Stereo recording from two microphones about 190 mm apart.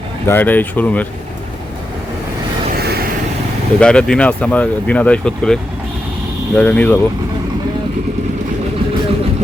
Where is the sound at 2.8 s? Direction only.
55° right (ahead or behind).